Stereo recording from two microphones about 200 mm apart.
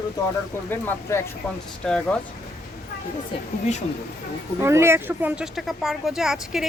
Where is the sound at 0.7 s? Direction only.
10° left (ahead or behind).